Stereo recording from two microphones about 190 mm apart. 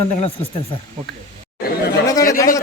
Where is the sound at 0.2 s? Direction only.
30° left (ahead or behind).